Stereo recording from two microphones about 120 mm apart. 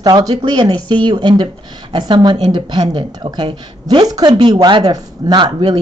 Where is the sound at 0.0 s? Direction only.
35° right (ahead or behind).